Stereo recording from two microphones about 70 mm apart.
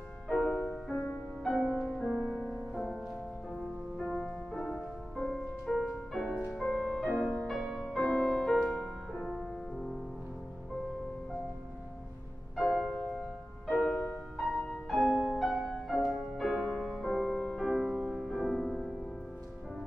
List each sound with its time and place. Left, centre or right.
0.3 s music: centre
0.9 s music: left
1.4 s music: centre
4.0 s music: centre
12.5 s music: centre
13.7 s music: centre
14.3 s music: centre